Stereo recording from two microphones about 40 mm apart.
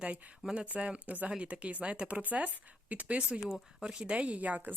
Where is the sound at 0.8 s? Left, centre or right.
Right.